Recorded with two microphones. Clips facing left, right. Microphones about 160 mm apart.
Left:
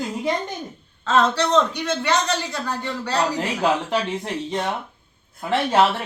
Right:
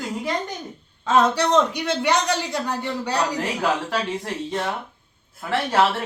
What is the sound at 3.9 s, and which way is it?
Speech, 20° left (ahead or behind).